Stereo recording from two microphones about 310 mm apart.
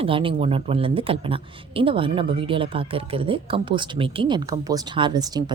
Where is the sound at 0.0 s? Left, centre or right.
Centre.